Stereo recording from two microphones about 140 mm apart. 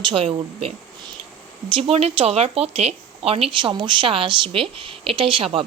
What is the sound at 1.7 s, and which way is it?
A woman's voice, 45° right (ahead or behind).